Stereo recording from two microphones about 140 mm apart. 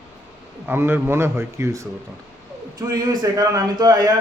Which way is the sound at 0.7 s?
15° right (ahead or behind).